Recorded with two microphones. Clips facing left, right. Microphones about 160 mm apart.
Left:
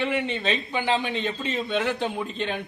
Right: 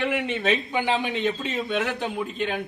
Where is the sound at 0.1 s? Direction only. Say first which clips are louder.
Right 2 dB; 10° right (ahead or behind).